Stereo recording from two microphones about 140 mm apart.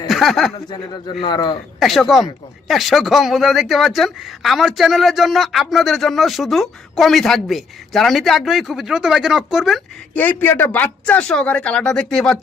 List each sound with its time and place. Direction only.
0.1 s speech: centre (ahead or behind)
1.2 s a man's voice: 30° left (ahead or behind)
1.8 s speech: centre (ahead or behind)
10.2 s speech: 15° left (ahead or behind)